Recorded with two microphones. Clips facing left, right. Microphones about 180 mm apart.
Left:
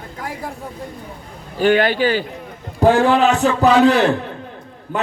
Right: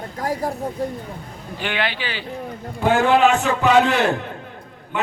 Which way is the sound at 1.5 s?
45° left (ahead or behind).